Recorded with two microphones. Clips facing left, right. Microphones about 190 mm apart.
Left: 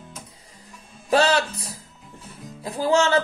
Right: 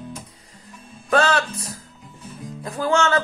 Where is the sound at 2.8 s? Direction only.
35° left (ahead or behind).